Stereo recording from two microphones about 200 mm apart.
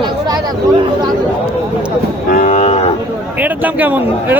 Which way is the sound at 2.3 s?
35° left (ahead or behind).